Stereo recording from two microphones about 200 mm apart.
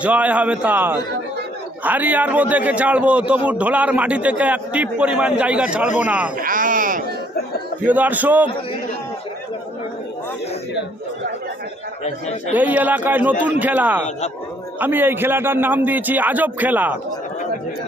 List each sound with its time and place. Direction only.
0.0 s a man's voice: 5° right (ahead or behind)
6.3 s a sound: 45° right (ahead or behind)
7.9 s a man's voice: 10° right (ahead or behind)
12.5 s a man's voice: 10° right (ahead or behind)